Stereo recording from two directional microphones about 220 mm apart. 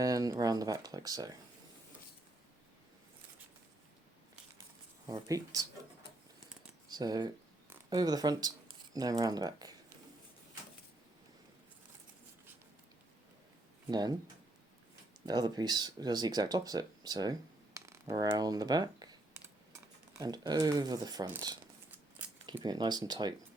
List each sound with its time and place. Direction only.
0.0 s speech: 15° right (ahead or behind)
5.0 s speech: 15° right (ahead or behind)
6.8 s speech: 20° right (ahead or behind)
13.9 s speech: 20° right (ahead or behind)
15.3 s speech: 20° right (ahead or behind)